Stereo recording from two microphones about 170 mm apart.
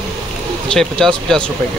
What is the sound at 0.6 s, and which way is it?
Speech, 5° left (ahead or behind).